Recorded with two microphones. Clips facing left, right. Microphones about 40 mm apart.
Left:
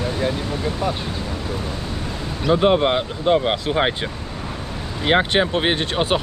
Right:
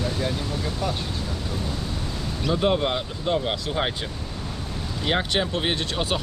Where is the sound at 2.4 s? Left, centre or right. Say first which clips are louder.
Left 6 dB; left.